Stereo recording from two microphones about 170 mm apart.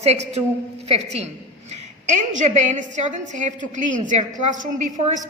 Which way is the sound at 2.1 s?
45° right (ahead or behind).